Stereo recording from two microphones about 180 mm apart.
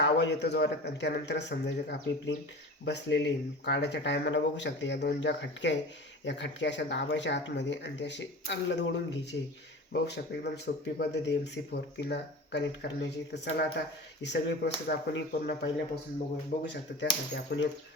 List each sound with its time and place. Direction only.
0.0 s speech: 75° left (ahead or behind)